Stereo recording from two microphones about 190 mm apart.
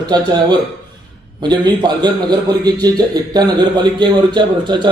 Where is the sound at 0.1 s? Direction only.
20° right (ahead or behind).